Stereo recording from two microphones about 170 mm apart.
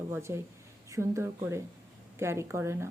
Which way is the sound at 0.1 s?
15° right (ahead or behind).